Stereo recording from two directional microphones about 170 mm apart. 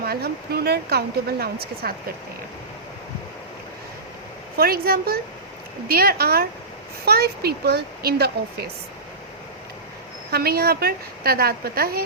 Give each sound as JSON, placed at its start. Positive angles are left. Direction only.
{"t": 0.0, "sound": "speech", "side_deg": -65}
{"t": 4.5, "sound": "a woman's voice", "side_deg": -65}
{"t": 10.3, "sound": "a woman's voice", "side_deg": -65}